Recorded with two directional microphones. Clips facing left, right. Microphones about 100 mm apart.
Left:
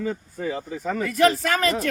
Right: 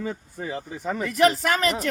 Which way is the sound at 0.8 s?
20° right (ahead or behind).